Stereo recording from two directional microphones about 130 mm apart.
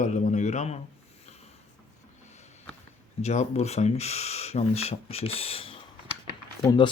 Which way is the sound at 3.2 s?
60° left (ahead or behind).